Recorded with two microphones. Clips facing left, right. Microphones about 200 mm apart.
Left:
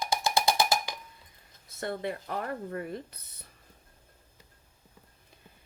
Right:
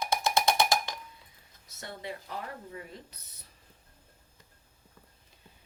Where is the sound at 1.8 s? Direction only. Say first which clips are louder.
Left 7 dB; 55° left (ahead or behind).